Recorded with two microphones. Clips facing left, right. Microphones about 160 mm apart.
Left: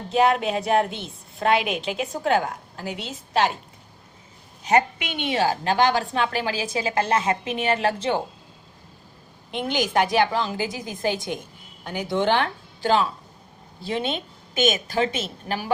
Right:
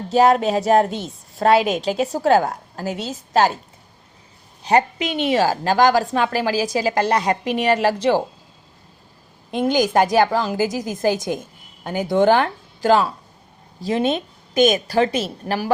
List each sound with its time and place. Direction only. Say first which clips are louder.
0.1 s a woman's voice: right 5 dB; 35° right (ahead or behind)
4.6 s a woman's voice: right 3 dB; 35° right (ahead or behind)
9.5 s a woman's voice: right 7 dB; 40° right (ahead or behind)